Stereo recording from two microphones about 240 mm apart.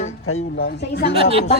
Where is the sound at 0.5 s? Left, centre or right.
Left.